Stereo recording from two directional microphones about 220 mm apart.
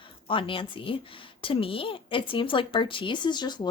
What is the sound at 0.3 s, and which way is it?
A woman's voice, 25° left (ahead or behind).